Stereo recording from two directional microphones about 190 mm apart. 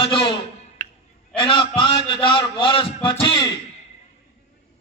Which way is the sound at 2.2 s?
25° left (ahead or behind).